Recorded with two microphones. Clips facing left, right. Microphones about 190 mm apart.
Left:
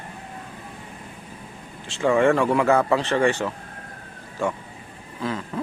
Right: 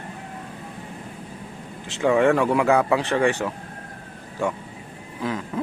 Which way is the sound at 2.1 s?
5° right (ahead or behind).